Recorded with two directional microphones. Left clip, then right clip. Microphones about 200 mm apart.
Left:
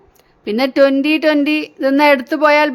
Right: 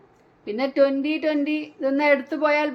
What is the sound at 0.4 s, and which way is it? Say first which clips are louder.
A woman's voice: left 8 dB; 50° left (ahead or behind).